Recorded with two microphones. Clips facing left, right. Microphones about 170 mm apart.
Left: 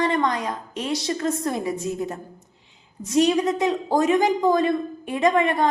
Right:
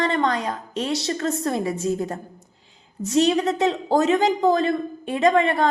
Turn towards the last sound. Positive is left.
turn(degrees=-30)  # may be behind; listen again after turning